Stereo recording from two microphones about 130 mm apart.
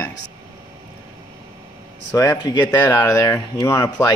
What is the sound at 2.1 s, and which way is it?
Speech, 20° left (ahead or behind).